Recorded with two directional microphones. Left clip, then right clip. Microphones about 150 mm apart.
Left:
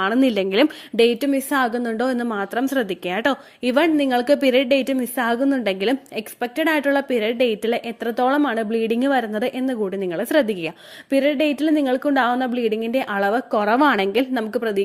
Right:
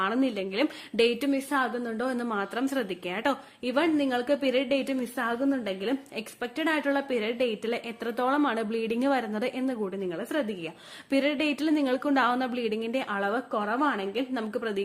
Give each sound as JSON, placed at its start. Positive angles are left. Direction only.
{"t": 0.0, "sound": "a woman's voice", "side_deg": 50}
{"t": 11.1, "sound": "a woman's voice", "side_deg": 30}